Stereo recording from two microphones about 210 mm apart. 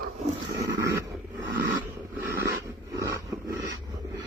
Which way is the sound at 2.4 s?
45° right (ahead or behind).